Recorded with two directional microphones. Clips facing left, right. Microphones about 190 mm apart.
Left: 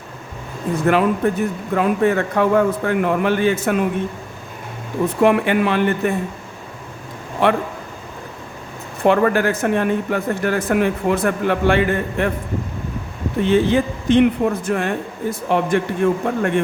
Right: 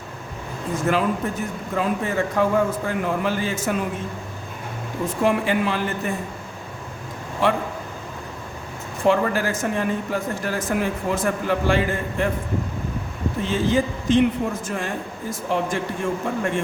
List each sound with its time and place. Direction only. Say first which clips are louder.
0.9 s speech: left 6 dB; 60° left (ahead or behind)
5.0 s speech: left 5 dB; 60° left (ahead or behind)
7.4 s speech: left 4 dB; 60° left (ahead or behind)
9.0 s speech: left 4 dB; 60° left (ahead or behind)
13.4 s speech: left 6 dB; 60° left (ahead or behind)